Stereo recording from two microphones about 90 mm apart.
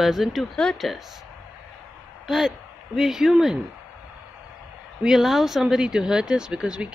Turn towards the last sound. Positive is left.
turn(degrees=-10)  # may be behind; listen again after turning